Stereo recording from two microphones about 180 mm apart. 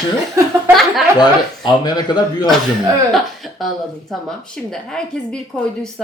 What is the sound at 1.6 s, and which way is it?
Speech, 25° left (ahead or behind).